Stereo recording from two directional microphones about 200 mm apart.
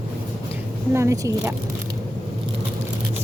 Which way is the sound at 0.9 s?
15° right (ahead or behind).